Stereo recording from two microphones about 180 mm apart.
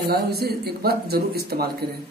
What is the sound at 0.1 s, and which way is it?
Speech, 60° right (ahead or behind).